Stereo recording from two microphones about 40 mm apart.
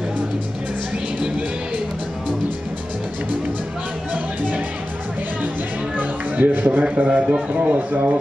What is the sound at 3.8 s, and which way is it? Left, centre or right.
Music, right.